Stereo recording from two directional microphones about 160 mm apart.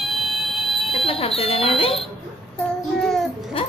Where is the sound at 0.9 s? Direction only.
35° left (ahead or behind).